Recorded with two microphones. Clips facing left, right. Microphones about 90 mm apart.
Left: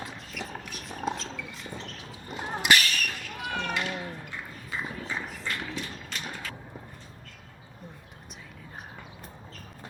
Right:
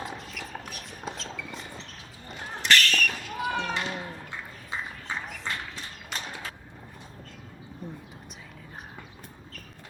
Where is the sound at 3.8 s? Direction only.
20° right (ahead or behind).